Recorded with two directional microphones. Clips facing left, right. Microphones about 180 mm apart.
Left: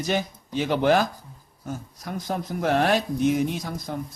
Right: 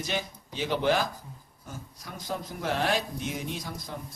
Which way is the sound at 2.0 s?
60° left (ahead or behind).